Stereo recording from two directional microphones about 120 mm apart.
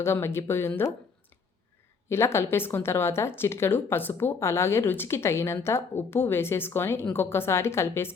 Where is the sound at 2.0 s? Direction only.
20° left (ahead or behind).